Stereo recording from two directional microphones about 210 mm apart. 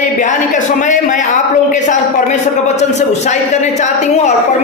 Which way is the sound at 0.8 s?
35° left (ahead or behind).